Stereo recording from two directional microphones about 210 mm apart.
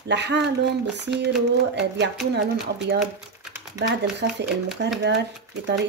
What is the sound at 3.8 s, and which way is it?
Speech, 55° right (ahead or behind).